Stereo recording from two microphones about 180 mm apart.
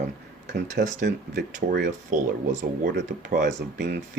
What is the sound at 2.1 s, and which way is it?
Speech, 45° right (ahead or behind).